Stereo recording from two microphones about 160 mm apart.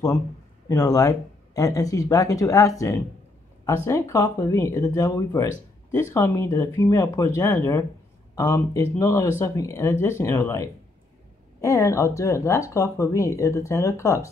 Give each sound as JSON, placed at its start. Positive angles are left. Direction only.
{"t": 0.7, "sound": "speech", "side_deg": 20}